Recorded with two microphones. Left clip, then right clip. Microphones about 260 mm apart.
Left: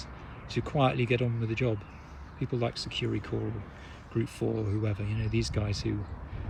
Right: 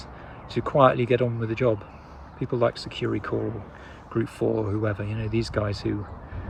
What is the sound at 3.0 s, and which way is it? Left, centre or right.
Speech, right.